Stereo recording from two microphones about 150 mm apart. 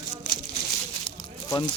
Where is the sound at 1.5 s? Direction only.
30° left (ahead or behind).